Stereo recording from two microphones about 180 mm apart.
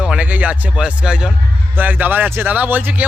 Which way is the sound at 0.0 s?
5° right (ahead or behind).